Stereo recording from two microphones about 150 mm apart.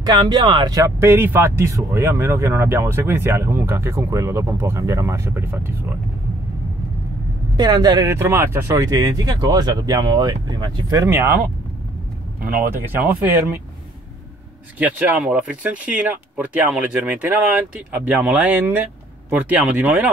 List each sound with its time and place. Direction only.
0.0 s speech: 30° right (ahead or behind)
7.5 s speech: 25° right (ahead or behind)
12.7 s speech: 15° right (ahead or behind)
14.8 s speech: 10° right (ahead or behind)